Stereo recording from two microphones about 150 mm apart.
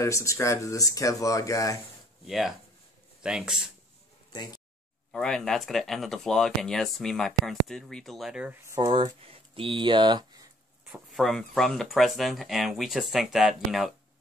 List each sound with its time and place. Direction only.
0.0 s speech: 20° left (ahead or behind)
2.2 s speech: centre (ahead or behind)
4.3 s speech: 25° left (ahead or behind)
5.1 s speech: 5° left (ahead or behind)
8.6 s speech: 25° right (ahead or behind)
11.1 s speech: centre (ahead or behind)